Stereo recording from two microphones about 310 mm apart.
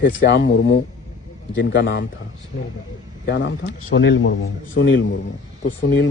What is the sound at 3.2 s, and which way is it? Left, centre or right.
A man's voice, left.